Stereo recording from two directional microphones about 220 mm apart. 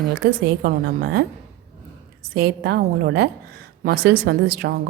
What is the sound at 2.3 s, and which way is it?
A woman's voice, 45° right (ahead or behind).